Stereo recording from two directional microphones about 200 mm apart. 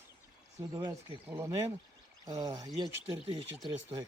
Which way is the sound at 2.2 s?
20° right (ahead or behind).